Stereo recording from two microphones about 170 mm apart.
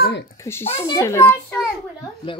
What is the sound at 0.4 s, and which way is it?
A child's voice, 15° left (ahead or behind).